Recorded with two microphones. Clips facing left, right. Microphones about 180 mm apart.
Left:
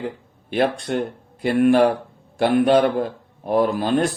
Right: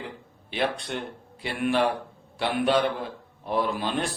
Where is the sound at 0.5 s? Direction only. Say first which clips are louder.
Left 8 dB; 50° left (ahead or behind).